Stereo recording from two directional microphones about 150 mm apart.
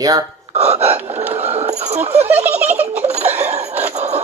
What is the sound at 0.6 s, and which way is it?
Gasp, 45° right (ahead or behind).